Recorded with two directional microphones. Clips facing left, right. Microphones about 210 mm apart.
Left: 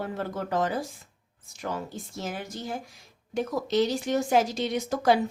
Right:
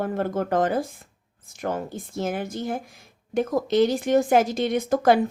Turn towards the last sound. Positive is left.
turn(degrees=-55)  # may be behind; listen again after turning